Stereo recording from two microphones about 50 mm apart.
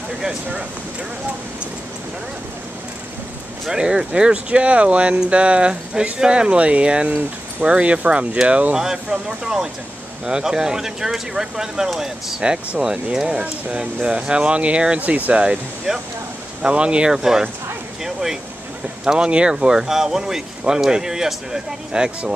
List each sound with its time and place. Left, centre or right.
3.6 s speech: centre
8.7 s speech: centre
12.4 s speech: centre
15.9 s speech: centre
16.6 s speech: right
19.1 s speech: right